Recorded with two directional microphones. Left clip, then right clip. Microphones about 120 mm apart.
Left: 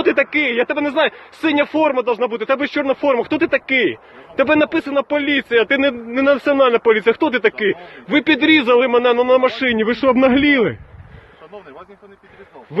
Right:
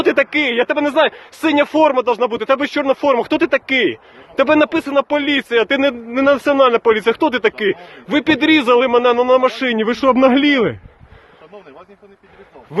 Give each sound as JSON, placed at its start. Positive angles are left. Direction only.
{"t": 0.0, "sound": "speech", "side_deg": -45}